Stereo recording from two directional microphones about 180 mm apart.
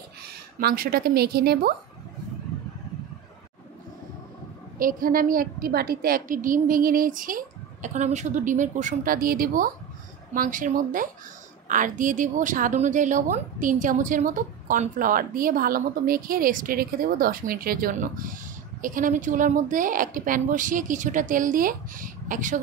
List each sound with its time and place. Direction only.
0.6 s a woman's voice: 55° right (ahead or behind)
4.7 s a woman's voice: 50° right (ahead or behind)